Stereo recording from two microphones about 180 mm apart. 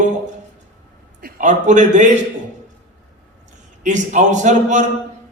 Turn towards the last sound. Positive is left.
turn(degrees=-40)  # may be behind; listen again after turning